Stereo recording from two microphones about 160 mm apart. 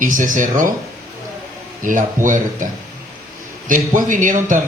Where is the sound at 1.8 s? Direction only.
55° right (ahead or behind).